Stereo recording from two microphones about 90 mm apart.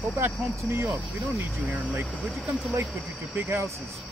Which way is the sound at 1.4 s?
10° right (ahead or behind).